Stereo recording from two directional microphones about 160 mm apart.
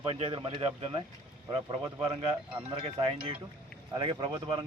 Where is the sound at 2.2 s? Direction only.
30° right (ahead or behind).